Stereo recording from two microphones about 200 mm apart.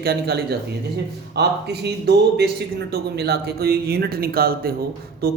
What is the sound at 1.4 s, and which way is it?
Speech, 55° right (ahead or behind).